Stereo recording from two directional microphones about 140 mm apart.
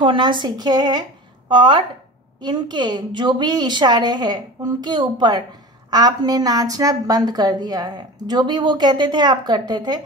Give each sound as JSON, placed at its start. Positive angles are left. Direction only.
{"t": 0.0, "sound": "a woman's voice", "side_deg": -35}